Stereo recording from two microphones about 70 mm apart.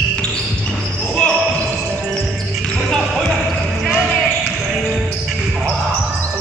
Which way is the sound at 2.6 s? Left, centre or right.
Centre.